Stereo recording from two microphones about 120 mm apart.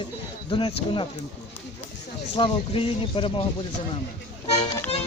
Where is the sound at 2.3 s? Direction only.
50° left (ahead or behind).